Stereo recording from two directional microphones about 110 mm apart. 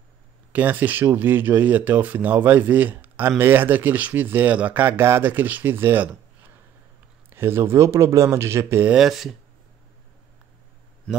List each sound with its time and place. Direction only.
0.5 s speech: 15° right (ahead or behind)
8.9 s speech: centre (ahead or behind)
11.1 s a man's voice: 10° left (ahead or behind)